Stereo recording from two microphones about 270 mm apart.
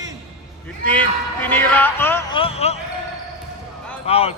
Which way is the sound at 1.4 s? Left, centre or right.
Centre.